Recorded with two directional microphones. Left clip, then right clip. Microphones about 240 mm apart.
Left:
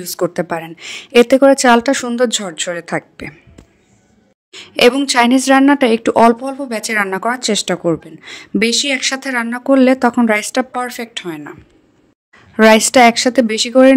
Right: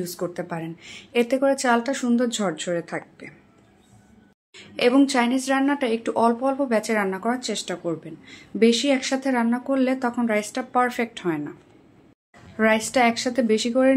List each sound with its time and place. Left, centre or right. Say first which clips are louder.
0.0 s speech: left 11 dB; left
4.5 s a woman's voice: left 10 dB; left
6.4 s speech: even; centre
6.8 s speech: left 8 dB; left
11.0 s speech: even; centre
12.5 s speech: left 12 dB; left